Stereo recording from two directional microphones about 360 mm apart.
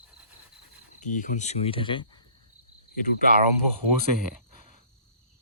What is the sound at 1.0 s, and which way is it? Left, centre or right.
Speech, left.